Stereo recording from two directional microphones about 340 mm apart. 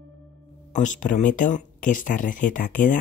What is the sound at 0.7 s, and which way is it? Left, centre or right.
Speech, left.